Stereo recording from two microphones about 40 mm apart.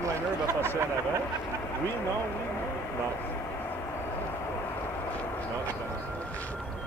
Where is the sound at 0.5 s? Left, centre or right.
Left.